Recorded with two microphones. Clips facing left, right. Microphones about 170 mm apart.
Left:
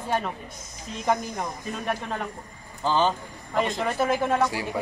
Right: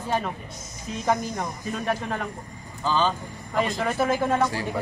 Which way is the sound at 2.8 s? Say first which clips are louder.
Left 1 dB; 15° left (ahead or behind).